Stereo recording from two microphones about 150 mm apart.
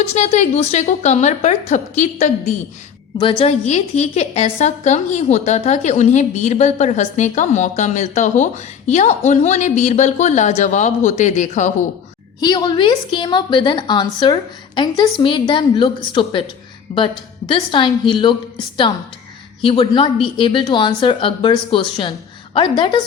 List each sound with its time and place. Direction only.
0.1 s a woman's voice: 45° left (ahead or behind)
3.2 s a woman's voice: 35° left (ahead or behind); by 11.7 s 55° left (ahead or behind)
12.4 s a woman's voice: 25° left (ahead or behind)
19.6 s speech: 35° left (ahead or behind)